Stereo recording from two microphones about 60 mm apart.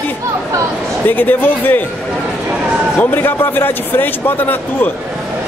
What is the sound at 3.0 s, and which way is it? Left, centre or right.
A man's voice, left.